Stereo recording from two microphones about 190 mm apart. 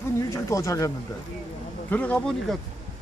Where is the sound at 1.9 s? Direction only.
10° left (ahead or behind).